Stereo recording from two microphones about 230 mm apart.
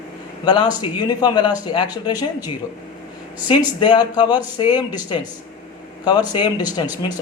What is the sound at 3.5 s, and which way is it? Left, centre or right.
Speech, centre.